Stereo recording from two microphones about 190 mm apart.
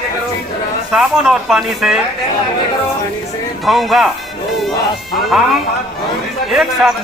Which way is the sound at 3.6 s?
Centre (ahead or behind).